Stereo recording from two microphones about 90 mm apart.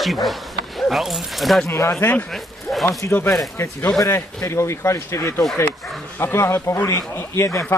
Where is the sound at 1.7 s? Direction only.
35° left (ahead or behind).